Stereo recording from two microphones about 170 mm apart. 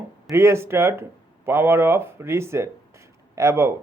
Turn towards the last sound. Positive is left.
turn(degrees=-15)  # may be behind; listen again after turning